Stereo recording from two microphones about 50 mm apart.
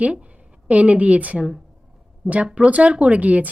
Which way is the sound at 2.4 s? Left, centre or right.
Right.